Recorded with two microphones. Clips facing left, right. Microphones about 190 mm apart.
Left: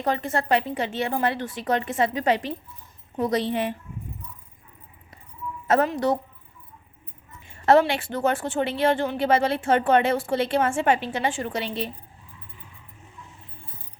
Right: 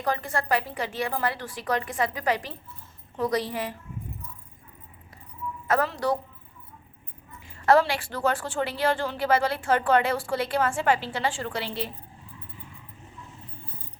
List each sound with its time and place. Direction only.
0.0 s a woman's voice: 25° left (ahead or behind)
5.6 s a woman's voice: 20° left (ahead or behind)
7.4 s a woman's voice: 25° left (ahead or behind)